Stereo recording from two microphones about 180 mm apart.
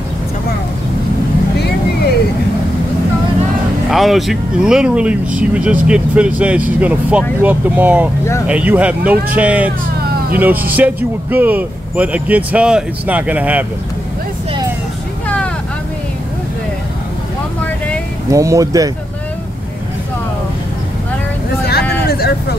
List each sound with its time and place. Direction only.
3.9 s speech: centre (ahead or behind)
15.2 s vehicle: 5° left (ahead or behind)
18.3 s speech: 15° right (ahead or behind)
22.0 s vehicle: 60° left (ahead or behind)